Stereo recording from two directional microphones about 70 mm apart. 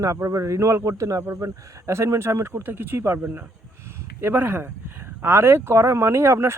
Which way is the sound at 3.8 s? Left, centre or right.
Right.